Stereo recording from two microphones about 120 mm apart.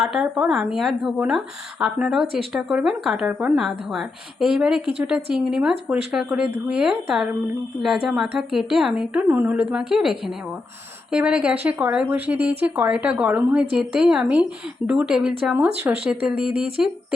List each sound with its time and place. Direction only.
0.0 s a woman's voice: 5° right (ahead or behind)
15.5 s a woman's voice: 20° right (ahead or behind)
16.0 s a woman's voice: 5° right (ahead or behind)